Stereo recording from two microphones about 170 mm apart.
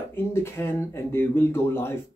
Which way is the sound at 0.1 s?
15° left (ahead or behind).